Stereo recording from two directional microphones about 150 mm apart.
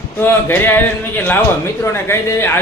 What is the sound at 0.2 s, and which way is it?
Speech, 15° left (ahead or behind).